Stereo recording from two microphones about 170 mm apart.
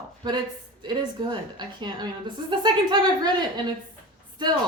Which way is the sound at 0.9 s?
25° right (ahead or behind).